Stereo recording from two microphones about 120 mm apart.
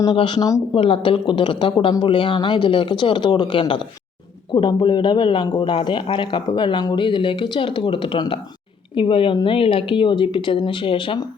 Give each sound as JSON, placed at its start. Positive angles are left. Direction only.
{"t": 0.0, "sound": "a man's voice", "side_deg": 40}